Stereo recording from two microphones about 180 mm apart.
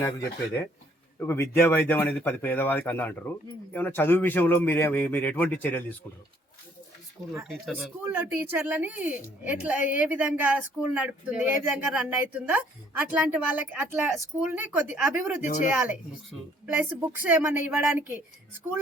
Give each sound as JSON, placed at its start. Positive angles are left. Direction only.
{"t": 0.0, "sound": "speech", "side_deg": 10}
{"t": 7.3, "sound": "speech", "side_deg": 0}
{"t": 8.0, "sound": "a woman's voice", "side_deg": -10}
{"t": 15.4, "sound": "speech", "side_deg": 45}
{"t": 16.6, "sound": "a woman's voice", "side_deg": -10}